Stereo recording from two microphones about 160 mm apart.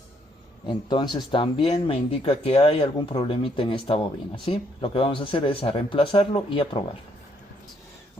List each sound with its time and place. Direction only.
0.6 s speech: 30° left (ahead or behind)